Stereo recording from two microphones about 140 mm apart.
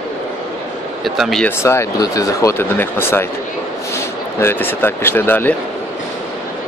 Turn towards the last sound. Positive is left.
turn(degrees=15)  # may be behind; listen again after turning